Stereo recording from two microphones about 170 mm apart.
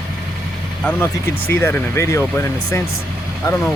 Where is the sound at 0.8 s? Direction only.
10° left (ahead or behind).